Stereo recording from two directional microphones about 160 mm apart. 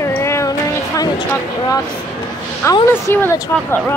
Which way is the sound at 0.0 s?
15° left (ahead or behind).